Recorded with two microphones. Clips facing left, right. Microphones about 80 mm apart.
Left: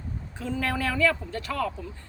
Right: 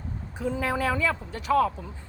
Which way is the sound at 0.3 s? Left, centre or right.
Centre.